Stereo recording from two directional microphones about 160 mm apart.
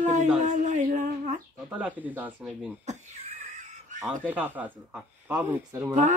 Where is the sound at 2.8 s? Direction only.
45° right (ahead or behind).